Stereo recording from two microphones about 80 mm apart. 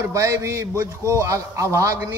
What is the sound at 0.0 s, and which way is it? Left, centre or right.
A man's voice, right.